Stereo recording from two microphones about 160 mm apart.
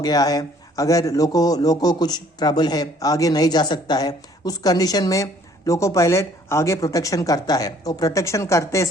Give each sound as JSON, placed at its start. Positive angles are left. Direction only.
{"t": 0.0, "sound": "a man's voice", "side_deg": 25}